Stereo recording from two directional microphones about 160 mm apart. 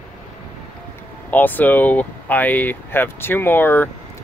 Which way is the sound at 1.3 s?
10° left (ahead or behind).